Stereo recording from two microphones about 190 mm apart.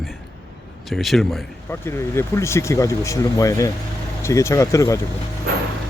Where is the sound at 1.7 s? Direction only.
15° left (ahead or behind).